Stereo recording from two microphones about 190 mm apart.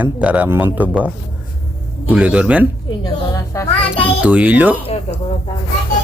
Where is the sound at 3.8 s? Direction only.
30° left (ahead or behind).